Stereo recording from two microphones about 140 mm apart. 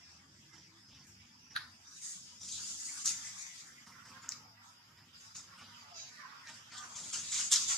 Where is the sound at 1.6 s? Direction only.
Centre (ahead or behind).